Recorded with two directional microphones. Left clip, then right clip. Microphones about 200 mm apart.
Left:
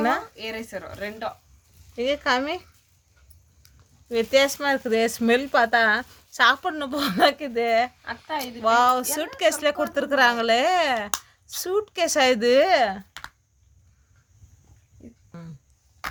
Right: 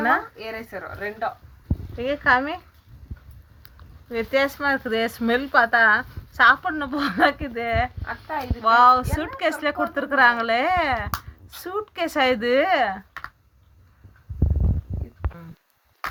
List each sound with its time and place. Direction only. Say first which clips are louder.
0.5 s speech: right 1 dB; 10° left (ahead or behind)
2.0 s a woman's voice: right 3 dB; 60° left (ahead or behind)
4.1 s a woman's voice: left 2 dB; 55° left (ahead or behind)
8.0 s speech: even; 5° left (ahead or behind)
8.6 s a woman's voice: right 4 dB; 55° left (ahead or behind)